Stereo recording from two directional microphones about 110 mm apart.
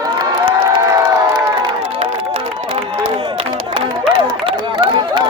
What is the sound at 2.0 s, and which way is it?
Music, 55° right (ahead or behind).